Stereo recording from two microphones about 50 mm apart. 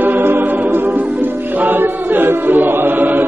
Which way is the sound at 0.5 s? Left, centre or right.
Right.